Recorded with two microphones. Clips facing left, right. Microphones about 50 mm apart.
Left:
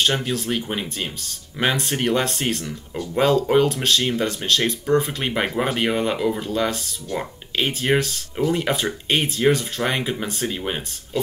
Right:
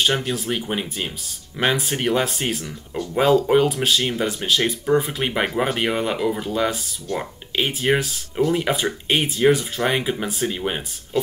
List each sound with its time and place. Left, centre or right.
0.0 s speech: centre